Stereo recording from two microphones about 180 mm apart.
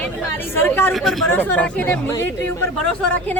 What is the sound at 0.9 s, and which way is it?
Speech, centre (ahead or behind).